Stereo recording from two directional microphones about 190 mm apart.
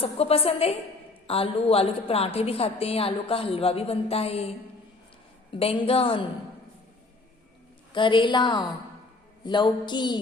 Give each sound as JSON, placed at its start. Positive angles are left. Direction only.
{"t": 0.0, "sound": "a woman's voice", "side_deg": 30}
{"t": 7.9, "sound": "a woman's voice", "side_deg": 25}